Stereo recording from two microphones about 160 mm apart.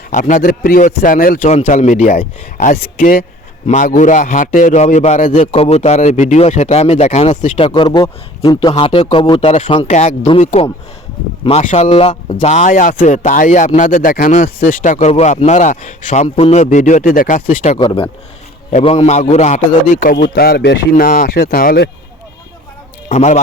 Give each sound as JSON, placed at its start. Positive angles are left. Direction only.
{"t": 0.1, "sound": "a man's voice", "side_deg": 50}
{"t": 1.5, "sound": "a man's voice", "side_deg": 45}
{"t": 7.7, "sound": "speech", "side_deg": 25}
{"t": 9.8, "sound": "a man's voice", "side_deg": 50}
{"t": 16.3, "sound": "a man's voice", "side_deg": 40}
{"t": 17.7, "sound": "a man's voice", "side_deg": 30}
{"t": 20.9, "sound": "a man's voice", "side_deg": 60}
{"t": 23.0, "sound": "a man's voice", "side_deg": 45}